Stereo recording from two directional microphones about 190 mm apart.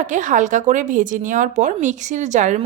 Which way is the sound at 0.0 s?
40° right (ahead or behind).